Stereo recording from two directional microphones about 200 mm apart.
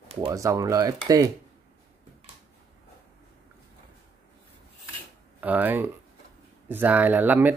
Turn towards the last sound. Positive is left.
turn(degrees=-10)  # may be behind; listen again after turning